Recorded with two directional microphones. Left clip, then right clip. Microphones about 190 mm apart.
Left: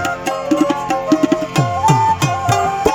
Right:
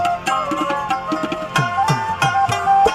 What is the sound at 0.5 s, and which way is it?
Music, 40° left (ahead or behind).